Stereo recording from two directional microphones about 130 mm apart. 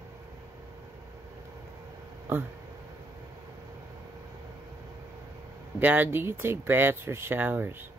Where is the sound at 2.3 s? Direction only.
15° right (ahead or behind).